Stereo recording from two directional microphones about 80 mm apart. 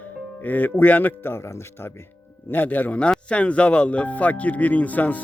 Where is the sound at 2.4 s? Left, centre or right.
Left.